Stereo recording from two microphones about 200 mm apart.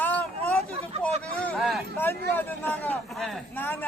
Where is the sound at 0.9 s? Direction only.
30° right (ahead or behind).